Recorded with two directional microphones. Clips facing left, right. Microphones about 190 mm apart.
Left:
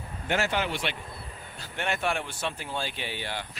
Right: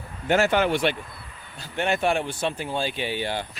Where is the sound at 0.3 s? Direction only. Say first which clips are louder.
Right 7 dB; 50° right (ahead or behind).